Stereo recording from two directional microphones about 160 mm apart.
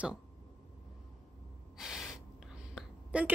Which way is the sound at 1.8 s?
Centre (ahead or behind).